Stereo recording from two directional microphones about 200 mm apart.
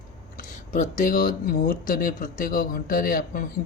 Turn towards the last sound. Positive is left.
turn(degrees=45)  # may be behind; listen again after turning